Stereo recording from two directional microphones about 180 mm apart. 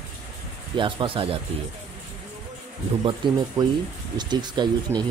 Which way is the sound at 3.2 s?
25° right (ahead or behind).